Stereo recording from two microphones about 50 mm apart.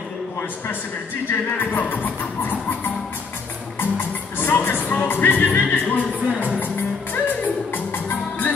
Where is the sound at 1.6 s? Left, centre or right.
Left.